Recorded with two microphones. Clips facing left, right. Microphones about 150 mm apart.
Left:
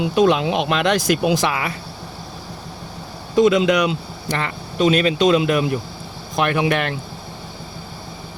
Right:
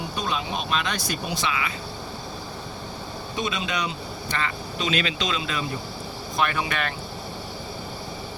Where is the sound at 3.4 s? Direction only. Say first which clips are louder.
Left 14 dB; 80° left.